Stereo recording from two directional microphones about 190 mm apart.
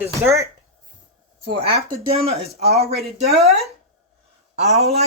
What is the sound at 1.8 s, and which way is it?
Speech, 30° right (ahead or behind).